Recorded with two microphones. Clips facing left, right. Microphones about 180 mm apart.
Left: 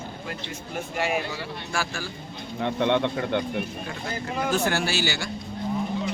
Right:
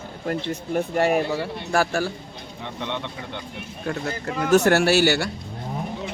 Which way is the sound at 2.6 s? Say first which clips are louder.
Left 8 dB; 60° left (ahead or behind).